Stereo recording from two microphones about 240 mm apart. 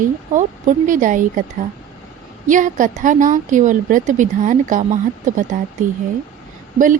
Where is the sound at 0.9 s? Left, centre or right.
Right.